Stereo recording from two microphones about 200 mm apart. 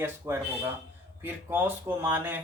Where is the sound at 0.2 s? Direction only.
10° right (ahead or behind).